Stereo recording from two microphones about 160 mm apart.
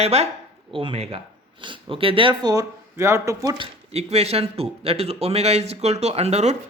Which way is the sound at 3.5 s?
35° right (ahead or behind).